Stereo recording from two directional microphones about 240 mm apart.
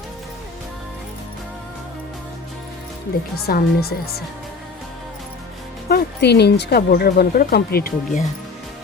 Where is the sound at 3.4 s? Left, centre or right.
Left.